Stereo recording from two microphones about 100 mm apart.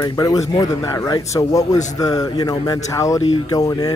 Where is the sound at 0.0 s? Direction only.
40° left (ahead or behind).